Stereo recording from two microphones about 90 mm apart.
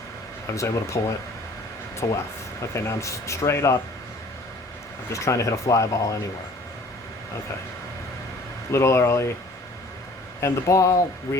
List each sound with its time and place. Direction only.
0.4 s speech: 35° left (ahead or behind)
2.0 s speech: 40° left (ahead or behind)
5.1 s speech: 35° left (ahead or behind)
8.7 s speech: 30° left (ahead or behind)
10.4 s speech: 35° left (ahead or behind)